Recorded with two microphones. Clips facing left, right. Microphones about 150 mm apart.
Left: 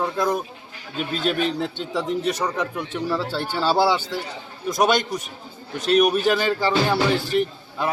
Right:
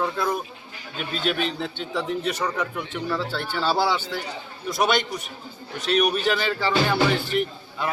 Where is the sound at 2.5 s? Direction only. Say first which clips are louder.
Left 2 dB; 15° left (ahead or behind).